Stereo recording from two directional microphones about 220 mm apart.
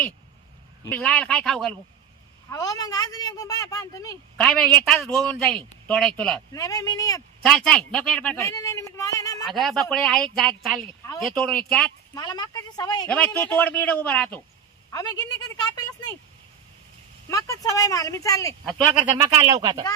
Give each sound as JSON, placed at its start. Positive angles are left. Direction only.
{"t": 0.9, "sound": "a man's voice", "side_deg": 5}
{"t": 2.5, "sound": "speech", "side_deg": 15}
{"t": 4.4, "sound": "a man's voice", "side_deg": 5}
{"t": 6.5, "sound": "speech", "side_deg": 15}
{"t": 7.4, "sound": "speech", "side_deg": 5}
{"t": 9.4, "sound": "a man's voice", "side_deg": 0}
{"t": 12.1, "sound": "speech", "side_deg": 15}
{"t": 13.1, "sound": "a woman's voice", "side_deg": 5}
{"t": 17.2, "sound": "speech", "side_deg": 15}
{"t": 18.7, "sound": "speech", "side_deg": -20}